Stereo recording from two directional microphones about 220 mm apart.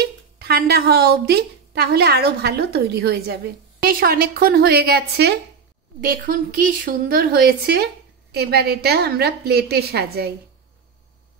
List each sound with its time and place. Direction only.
0.0 s a woman's voice: 45° right (ahead or behind)